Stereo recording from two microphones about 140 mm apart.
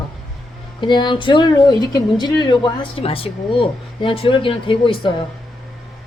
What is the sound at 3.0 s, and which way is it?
Speech, 40° left (ahead or behind).